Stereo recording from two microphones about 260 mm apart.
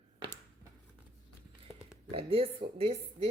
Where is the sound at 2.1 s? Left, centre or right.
Right.